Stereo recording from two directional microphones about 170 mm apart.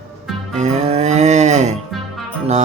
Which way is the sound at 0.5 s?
45° right (ahead or behind).